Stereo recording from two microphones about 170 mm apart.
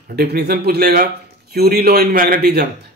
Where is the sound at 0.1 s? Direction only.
70° right (ahead or behind).